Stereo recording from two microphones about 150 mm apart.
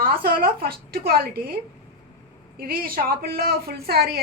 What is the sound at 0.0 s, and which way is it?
A woman's voice, 85° right.